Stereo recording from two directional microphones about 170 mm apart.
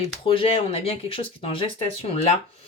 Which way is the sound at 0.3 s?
35° left (ahead or behind).